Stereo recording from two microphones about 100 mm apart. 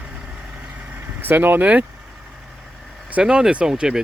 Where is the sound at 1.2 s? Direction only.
20° right (ahead or behind).